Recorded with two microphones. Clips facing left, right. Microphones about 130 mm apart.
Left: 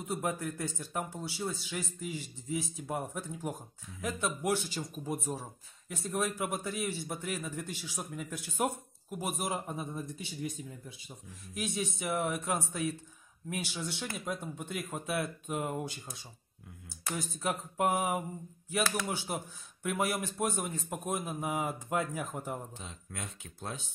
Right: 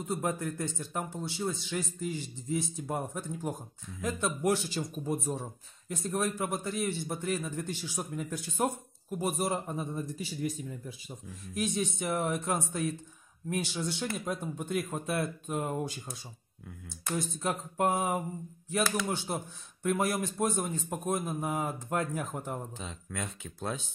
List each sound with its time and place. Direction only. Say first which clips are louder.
0.3 s a sound: right 2 dB; 10° left (ahead or behind)
1.5 s a man's voice: right 4 dB; 5° left (ahead or behind)
11.5 s a man's voice: right 4 dB; 5° left (ahead or behind)
17.0 s a sound: right 2 dB; 5° left (ahead or behind)
19.8 s a man's voice: right 3 dB; 5° left (ahead or behind)
22.8 s speech: right 5 dB; 90° right